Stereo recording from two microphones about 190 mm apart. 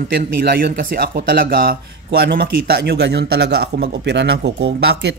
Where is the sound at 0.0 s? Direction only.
55° right (ahead or behind).